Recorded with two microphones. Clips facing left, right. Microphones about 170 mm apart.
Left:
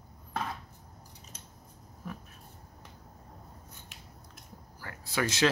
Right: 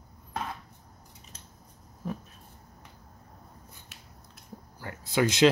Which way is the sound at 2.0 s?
30° right (ahead or behind).